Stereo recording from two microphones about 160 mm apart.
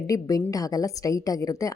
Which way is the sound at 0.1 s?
20° left (ahead or behind).